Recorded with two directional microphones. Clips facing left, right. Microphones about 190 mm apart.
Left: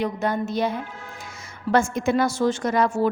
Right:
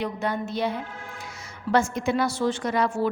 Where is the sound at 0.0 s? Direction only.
45° left (ahead or behind).